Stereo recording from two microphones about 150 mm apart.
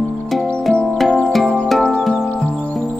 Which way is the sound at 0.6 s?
Centre (ahead or behind).